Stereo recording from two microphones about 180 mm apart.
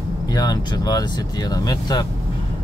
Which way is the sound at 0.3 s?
20° left (ahead or behind).